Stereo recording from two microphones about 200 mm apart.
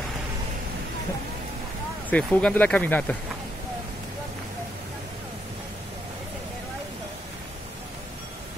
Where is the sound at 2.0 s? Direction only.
5° left (ahead or behind).